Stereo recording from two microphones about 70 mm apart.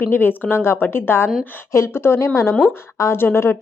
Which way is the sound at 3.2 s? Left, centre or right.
Left.